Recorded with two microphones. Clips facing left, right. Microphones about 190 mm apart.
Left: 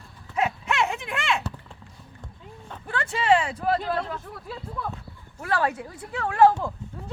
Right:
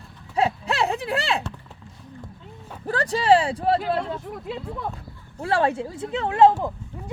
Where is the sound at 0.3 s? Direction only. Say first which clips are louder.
Right 2 dB; 35° right (ahead or behind).